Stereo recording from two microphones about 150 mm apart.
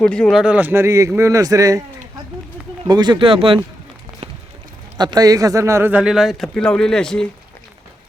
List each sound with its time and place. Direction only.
0.0 s a man's voice: 5° left (ahead or behind); by 1.8 s 20° right (ahead or behind)
2.8 s speech: 30° right (ahead or behind)
4.9 s speech: 30° right (ahead or behind); by 7.3 s 5° left (ahead or behind)